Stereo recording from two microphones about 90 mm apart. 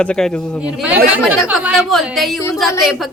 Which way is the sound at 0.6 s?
15° right (ahead or behind).